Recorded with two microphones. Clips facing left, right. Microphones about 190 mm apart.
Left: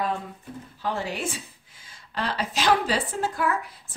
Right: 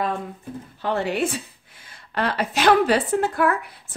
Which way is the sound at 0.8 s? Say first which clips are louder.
Right 6 dB; 65° right (ahead or behind).